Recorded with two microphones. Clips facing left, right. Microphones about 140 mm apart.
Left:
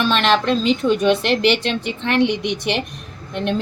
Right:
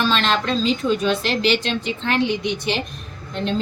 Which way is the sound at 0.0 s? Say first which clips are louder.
Left 3 dB; 60° left (ahead or behind).